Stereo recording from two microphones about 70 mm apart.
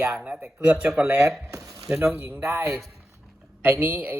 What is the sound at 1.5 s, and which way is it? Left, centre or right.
Speech, right.